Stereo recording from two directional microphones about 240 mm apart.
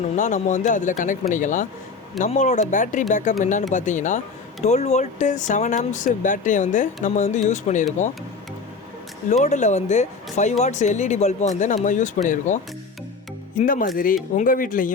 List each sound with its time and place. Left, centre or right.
0.2 s speech: left
9.3 s speech: left
13.6 s speech: left